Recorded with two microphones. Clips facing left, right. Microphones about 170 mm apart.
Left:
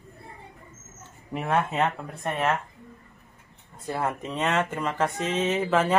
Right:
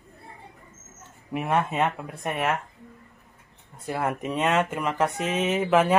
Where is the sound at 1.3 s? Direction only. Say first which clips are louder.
Right 1 dB; 10° right (ahead or behind).